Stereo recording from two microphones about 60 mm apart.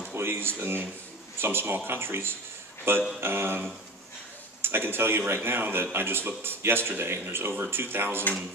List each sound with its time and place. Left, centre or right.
0.1 s speech: right